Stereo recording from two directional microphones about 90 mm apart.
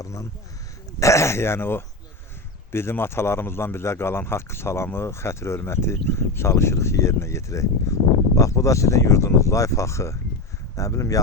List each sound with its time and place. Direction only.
0.0 s a man's voice: 40° left (ahead or behind)